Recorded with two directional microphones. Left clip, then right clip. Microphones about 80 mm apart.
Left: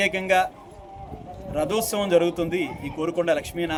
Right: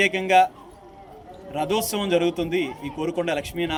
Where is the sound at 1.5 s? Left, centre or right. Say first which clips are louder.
Even; left.